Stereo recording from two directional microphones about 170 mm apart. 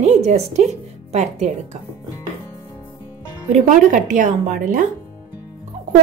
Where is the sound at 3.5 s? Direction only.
45° right (ahead or behind).